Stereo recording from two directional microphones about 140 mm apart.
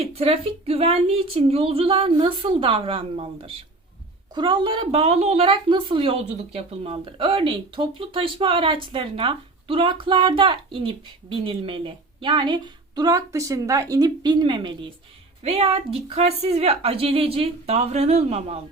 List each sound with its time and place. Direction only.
0.0 s a woman's voice: 45° right (ahead or behind)
15.4 s speech: 45° right (ahead or behind)